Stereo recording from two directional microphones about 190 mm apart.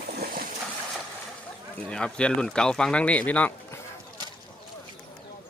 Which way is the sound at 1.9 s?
5° left (ahead or behind).